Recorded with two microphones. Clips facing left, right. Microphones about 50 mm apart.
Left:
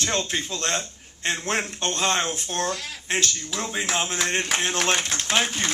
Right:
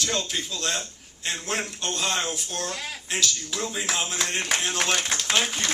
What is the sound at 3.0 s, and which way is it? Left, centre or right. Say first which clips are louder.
A man's voice: left 3 dB; left.